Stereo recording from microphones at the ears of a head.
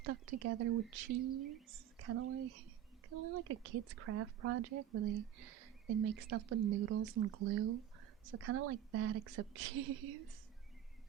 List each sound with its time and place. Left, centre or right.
0.0 s speech: right